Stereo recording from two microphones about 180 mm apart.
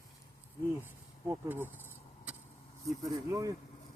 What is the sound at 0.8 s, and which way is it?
Speech, 10° right (ahead or behind).